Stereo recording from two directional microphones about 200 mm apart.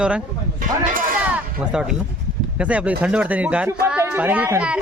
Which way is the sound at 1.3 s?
5° right (ahead or behind).